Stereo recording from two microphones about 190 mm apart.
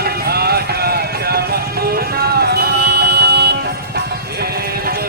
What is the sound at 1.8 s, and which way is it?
Music, 55° right (ahead or behind).